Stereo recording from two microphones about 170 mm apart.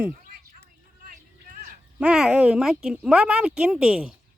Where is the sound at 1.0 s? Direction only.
55° right (ahead or behind).